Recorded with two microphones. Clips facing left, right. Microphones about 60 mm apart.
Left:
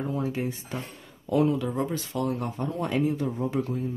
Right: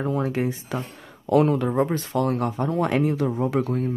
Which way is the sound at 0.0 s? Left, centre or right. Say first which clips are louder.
Right 5 dB; right.